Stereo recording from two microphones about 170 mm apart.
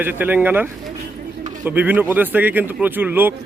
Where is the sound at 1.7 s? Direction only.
10° right (ahead or behind).